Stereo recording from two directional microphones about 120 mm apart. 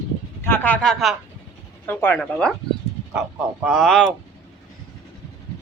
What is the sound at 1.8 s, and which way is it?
Speech, 15° left (ahead or behind).